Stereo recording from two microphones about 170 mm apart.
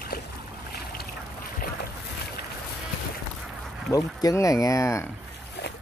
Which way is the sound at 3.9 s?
20° left (ahead or behind).